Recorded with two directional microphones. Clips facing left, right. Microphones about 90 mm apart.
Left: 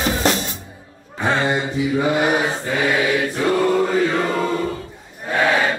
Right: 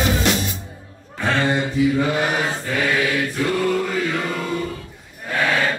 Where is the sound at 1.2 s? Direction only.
20° left (ahead or behind).